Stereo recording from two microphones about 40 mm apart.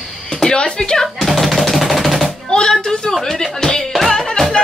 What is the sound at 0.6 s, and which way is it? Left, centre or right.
Speech, centre.